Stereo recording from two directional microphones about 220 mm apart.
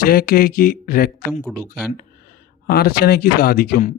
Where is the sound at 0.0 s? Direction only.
40° left (ahead or behind).